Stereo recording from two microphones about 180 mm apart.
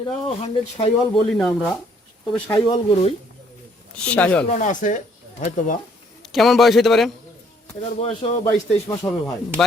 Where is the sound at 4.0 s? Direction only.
5° left (ahead or behind).